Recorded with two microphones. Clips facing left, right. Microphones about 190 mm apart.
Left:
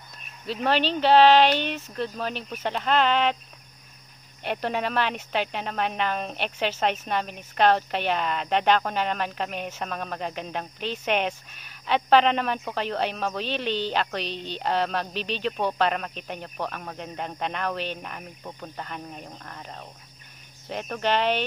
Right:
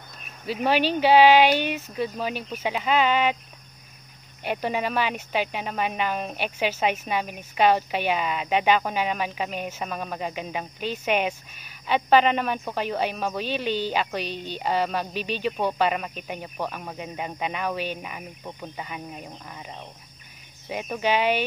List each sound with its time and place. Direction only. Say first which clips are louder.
0.5 s speech: right 2 dB; 5° right (ahead or behind)
4.4 s speech: right 1 dB; 5° right (ahead or behind)